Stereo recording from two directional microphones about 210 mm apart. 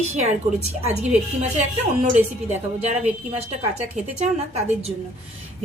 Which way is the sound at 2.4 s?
30° right (ahead or behind).